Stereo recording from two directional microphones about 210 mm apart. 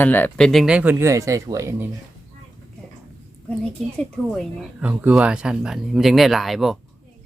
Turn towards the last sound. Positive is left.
turn(degrees=0)  # may be behind; listen again after turning